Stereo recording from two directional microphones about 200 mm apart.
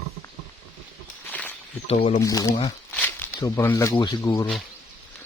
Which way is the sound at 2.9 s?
10° left (ahead or behind).